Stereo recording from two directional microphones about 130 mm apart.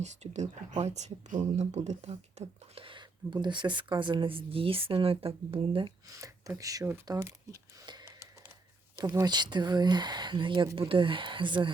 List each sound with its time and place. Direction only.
0.0 s speech: 60° right (ahead or behind)
2.7 s speech: 40° right (ahead or behind)
6.1 s speech: 25° right (ahead or behind)
7.9 s a sound: 35° right (ahead or behind)
9.0 s speech: 25° right (ahead or behind)